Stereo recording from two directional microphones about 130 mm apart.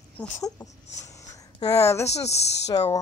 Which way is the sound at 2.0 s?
55° left (ahead or behind).